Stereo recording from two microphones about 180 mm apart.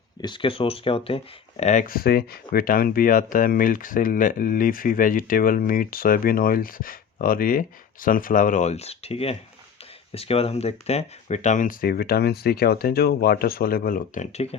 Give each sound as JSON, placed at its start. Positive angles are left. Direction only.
{"t": 0.2, "sound": "speech", "side_deg": 25}